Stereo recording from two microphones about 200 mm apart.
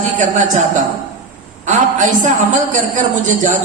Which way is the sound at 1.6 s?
40° right (ahead or behind).